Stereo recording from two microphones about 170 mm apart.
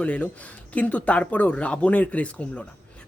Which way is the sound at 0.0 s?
5° left (ahead or behind).